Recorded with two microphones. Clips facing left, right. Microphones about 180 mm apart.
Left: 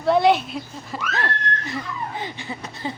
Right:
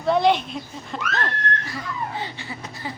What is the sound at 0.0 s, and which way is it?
Speech, centre (ahead or behind).